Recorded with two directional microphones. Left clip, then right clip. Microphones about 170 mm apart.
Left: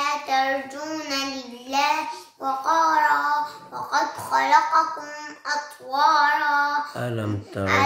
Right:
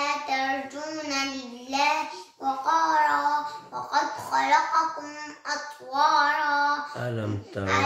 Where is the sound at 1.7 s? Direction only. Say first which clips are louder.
Left 3 dB; 20° left (ahead or behind).